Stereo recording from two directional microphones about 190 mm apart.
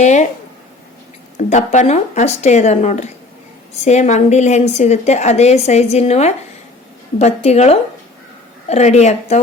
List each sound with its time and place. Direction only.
0.0 s a woman's voice: 40° left (ahead or behind)
1.4 s a woman's voice: 40° left (ahead or behind)